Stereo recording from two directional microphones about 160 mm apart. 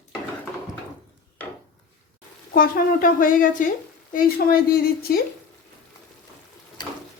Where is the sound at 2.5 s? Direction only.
65° left (ahead or behind).